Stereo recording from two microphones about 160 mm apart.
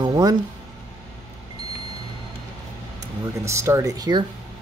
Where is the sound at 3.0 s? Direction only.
20° right (ahead or behind).